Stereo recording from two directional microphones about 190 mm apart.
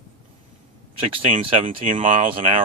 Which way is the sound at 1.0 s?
30° right (ahead or behind).